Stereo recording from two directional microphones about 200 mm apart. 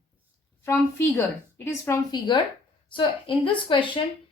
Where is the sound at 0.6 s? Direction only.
10° left (ahead or behind).